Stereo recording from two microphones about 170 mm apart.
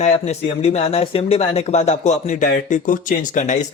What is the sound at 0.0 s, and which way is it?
Speech, 40° left (ahead or behind).